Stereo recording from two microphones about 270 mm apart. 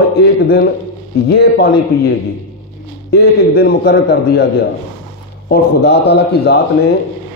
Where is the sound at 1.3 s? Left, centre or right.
Left.